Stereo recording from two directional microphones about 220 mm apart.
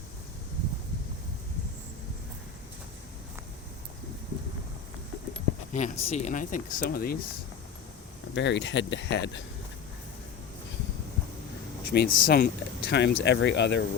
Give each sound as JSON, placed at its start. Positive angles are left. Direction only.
{"t": 5.7, "sound": "speech", "side_deg": 30}
{"t": 8.4, "sound": "speech", "side_deg": 55}
{"t": 11.9, "sound": "speech", "side_deg": 40}